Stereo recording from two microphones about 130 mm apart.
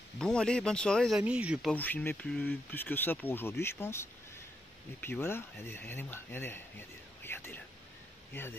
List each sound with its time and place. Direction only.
0.2 s speech: 5° left (ahead or behind)
1.2 s speech: 10° right (ahead or behind)
1.7 s speech: 10° left (ahead or behind)